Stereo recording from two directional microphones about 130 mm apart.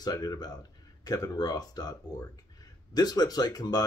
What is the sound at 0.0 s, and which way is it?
Speech, 30° left (ahead or behind).